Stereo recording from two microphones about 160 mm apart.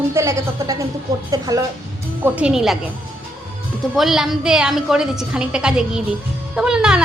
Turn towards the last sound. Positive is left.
turn(degrees=-5)  # may be behind; listen again after turning